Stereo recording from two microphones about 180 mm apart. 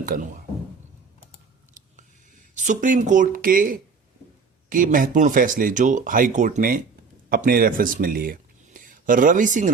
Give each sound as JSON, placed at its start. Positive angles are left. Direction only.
{"t": 0.0, "sound": "speech", "side_deg": -50}
{"t": 1.8, "sound": "a sound", "side_deg": -45}
{"t": 2.6, "sound": "speech", "side_deg": -45}